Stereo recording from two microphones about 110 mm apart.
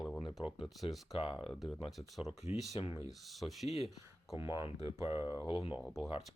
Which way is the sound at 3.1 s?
Centre (ahead or behind).